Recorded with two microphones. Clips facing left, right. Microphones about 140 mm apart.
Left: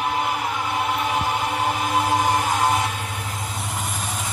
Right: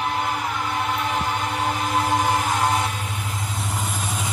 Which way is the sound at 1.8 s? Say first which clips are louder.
Even; 10° left (ahead or behind).